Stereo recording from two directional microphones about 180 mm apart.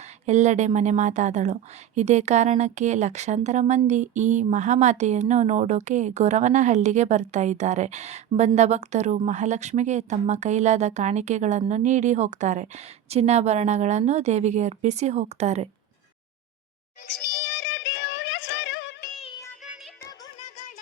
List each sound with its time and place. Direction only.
0.3 s speech: 40° right (ahead or behind)
17.3 s music: 90° left